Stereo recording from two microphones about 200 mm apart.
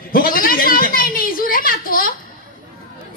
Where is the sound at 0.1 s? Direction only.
45° left (ahead or behind).